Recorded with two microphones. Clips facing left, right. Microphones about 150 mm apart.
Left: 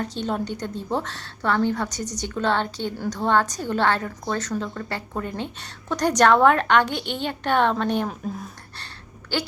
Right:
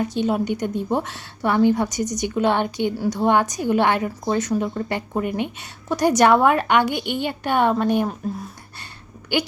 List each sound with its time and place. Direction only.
0.0 s a woman's voice: 10° right (ahead or behind)